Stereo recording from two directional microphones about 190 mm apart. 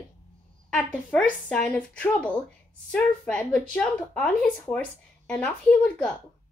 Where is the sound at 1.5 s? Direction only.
5° left (ahead or behind).